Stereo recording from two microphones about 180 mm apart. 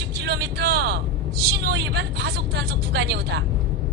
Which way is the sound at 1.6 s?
70° right (ahead or behind).